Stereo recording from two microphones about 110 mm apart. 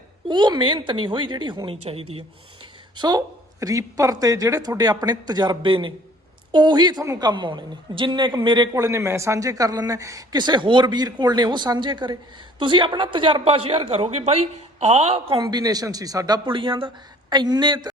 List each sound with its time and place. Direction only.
0.3 s a woman's voice: 45° right (ahead or behind)
1.7 s speech: 65° right (ahead or behind)
2.9 s a man's voice: 40° right (ahead or behind); by 15.4 s 65° right (ahead or behind)
15.4 s a man's voice: 35° right (ahead or behind)
16.5 s a man's voice: 50° right (ahead or behind)